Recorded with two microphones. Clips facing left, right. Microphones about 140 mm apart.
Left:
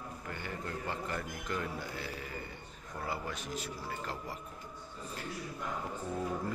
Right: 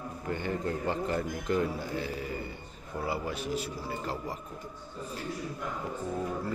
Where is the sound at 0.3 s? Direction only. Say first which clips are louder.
Right 9 dB; 25° right (ahead or behind).